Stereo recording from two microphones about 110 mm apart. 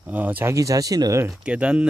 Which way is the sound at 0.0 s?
15° right (ahead or behind).